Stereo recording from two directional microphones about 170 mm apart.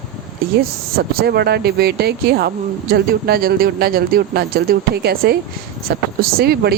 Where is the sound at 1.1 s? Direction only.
70° right (ahead or behind).